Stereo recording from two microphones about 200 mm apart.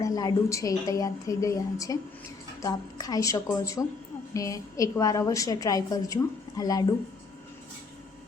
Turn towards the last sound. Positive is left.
turn(degrees=20)  # may be behind; listen again after turning